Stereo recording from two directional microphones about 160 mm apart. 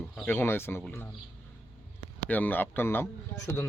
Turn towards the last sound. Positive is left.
turn(degrees=20)  # may be behind; listen again after turning